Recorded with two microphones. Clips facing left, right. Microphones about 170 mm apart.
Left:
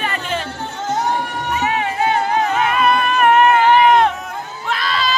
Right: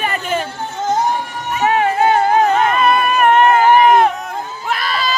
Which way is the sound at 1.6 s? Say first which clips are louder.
Right 7 dB; 50° right (ahead or behind).